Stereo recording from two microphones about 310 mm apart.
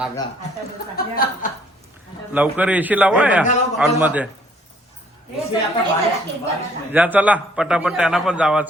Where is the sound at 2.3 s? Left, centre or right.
Centre.